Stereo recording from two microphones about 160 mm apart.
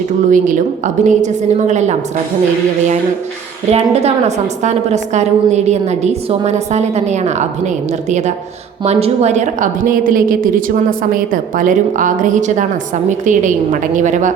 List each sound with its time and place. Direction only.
0.3 s a woman's voice: 55° right (ahead or behind)
3.7 s a woman's voice: 40° right (ahead or behind)
8.8 s a woman's voice: 40° right (ahead or behind)